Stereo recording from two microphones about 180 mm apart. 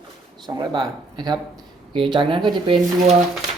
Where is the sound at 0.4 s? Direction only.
25° right (ahead or behind).